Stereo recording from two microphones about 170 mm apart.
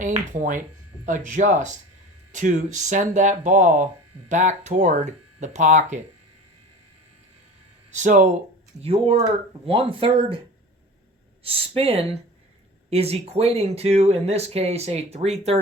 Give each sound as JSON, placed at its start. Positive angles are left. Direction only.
{"t": 0.0, "sound": "speech", "side_deg": -45}
{"t": 7.9, "sound": "speech", "side_deg": -45}
{"t": 8.8, "sound": "speech", "side_deg": -35}
{"t": 11.4, "sound": "speech", "side_deg": -35}